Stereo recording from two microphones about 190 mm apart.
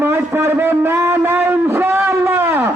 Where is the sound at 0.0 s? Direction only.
10° right (ahead or behind).